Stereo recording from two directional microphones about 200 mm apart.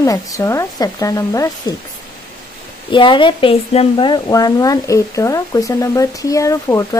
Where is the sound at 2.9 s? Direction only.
25° left (ahead or behind).